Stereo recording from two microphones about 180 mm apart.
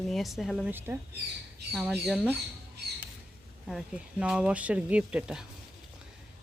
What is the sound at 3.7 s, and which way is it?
Speech, 5° right (ahead or behind).